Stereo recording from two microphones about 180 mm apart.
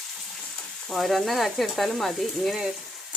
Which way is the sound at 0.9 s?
Centre (ahead or behind).